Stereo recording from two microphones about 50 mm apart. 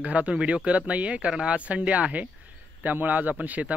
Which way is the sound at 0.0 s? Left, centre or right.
Right.